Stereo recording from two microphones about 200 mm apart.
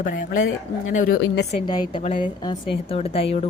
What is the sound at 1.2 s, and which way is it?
Speech, 55° left (ahead or behind).